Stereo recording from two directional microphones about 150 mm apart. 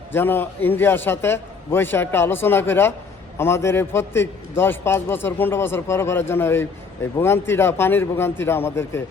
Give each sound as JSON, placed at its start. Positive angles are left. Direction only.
{"t": 0.1, "sound": "a man's voice", "side_deg": 15}